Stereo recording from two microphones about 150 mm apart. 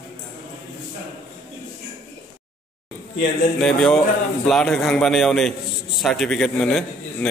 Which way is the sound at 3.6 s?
5° left (ahead or behind).